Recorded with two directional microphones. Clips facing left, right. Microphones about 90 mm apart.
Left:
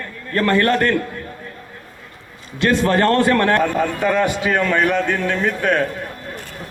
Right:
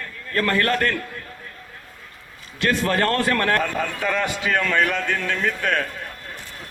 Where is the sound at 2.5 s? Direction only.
30° left (ahead or behind).